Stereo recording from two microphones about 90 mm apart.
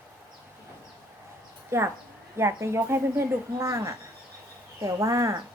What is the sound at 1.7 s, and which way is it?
Speech, 30° right (ahead or behind).